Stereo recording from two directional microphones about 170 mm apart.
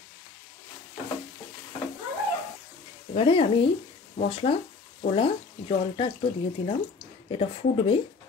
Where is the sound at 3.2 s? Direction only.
30° left (ahead or behind).